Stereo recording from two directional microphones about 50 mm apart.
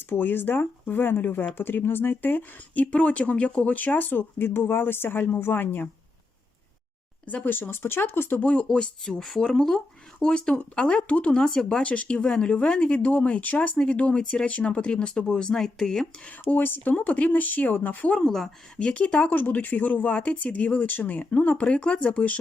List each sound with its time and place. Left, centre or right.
0.1 s speech: left
7.3 s speech: left
8.4 s speech: left
16.4 s speech: left
18.2 s speech: centre
18.8 s speech: left
21.7 s speech: left